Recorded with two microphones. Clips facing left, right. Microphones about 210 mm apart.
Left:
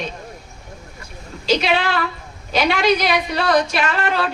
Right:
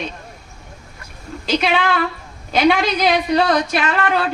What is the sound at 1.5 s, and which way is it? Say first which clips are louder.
A woman's voice: even; 55° right (ahead or behind).